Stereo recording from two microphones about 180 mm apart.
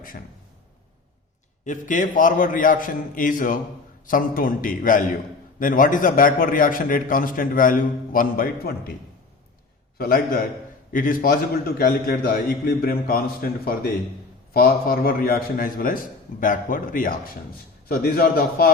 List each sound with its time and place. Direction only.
1.6 s a man's voice: 45° left (ahead or behind)
10.0 s a man's voice: 55° left (ahead or behind)